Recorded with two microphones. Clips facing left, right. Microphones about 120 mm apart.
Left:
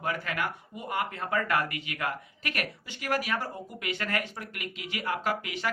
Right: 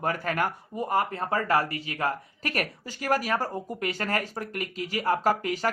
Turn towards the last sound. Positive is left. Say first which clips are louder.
# right 6 dB
turn(degrees=-40)  # may be behind; listen again after turning